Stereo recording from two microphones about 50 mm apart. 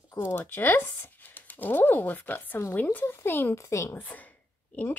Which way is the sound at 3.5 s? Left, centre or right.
Left.